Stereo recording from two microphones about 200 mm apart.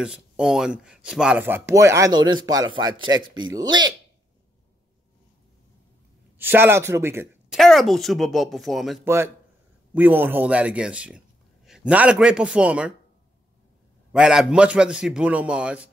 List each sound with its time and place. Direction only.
0.0 s speech: 5° right (ahead or behind); by 3.9 s 20° right (ahead or behind)
6.3 s speech: 10° right (ahead or behind)
7.5 s a man's voice: centre (ahead or behind)
9.0 s speech: 10° right (ahead or behind)
14.1 s a man's voice: 5° right (ahead or behind)